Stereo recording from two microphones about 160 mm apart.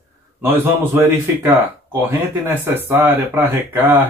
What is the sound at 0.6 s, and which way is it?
Speech, 15° right (ahead or behind).